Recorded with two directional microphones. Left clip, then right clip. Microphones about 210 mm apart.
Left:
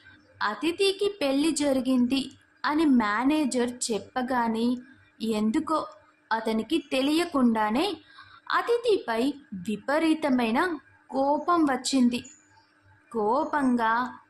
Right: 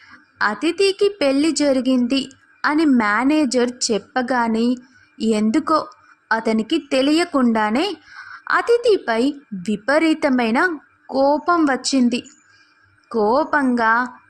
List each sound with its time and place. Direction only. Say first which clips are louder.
0.3 s a woman's voice: right 8 dB; 30° right (ahead or behind)
11.1 s speech: right 8 dB; 10° right (ahead or behind)
11.9 s a woman's voice: right 6 dB; 25° right (ahead or behind)